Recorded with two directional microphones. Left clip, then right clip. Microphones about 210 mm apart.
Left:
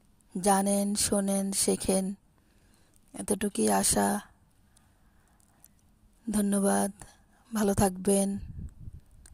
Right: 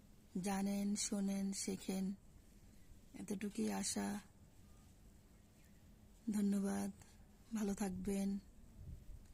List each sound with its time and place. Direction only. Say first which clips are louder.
0.3 s speech: left 17 dB; 45° left (ahead or behind)
3.1 s speech: left 16 dB; 45° left (ahead or behind)
6.3 s a woman's voice: left 15 dB; 40° left (ahead or behind)